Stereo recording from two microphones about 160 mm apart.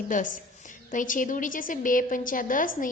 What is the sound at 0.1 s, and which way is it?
A woman's voice, 55° left (ahead or behind).